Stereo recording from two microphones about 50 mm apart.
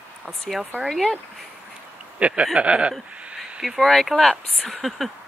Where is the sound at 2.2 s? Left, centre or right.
Centre.